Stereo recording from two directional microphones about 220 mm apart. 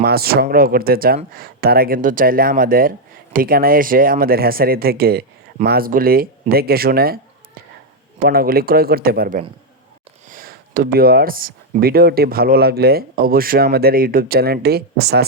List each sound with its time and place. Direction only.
0.0 s speech: 45° right (ahead or behind)
10.2 s a sound: 40° right (ahead or behind)
10.8 s speech: 45° right (ahead or behind)